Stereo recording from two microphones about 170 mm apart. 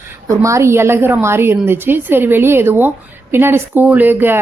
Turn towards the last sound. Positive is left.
turn(degrees=-10)  # may be behind; listen again after turning